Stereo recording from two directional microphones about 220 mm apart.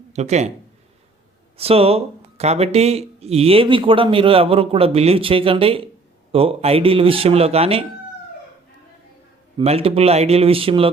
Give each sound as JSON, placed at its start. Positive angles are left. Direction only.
{"t": 0.1, "sound": "speech", "side_deg": -30}
{"t": 1.5, "sound": "speech", "side_deg": -25}
{"t": 9.6, "sound": "speech", "side_deg": -25}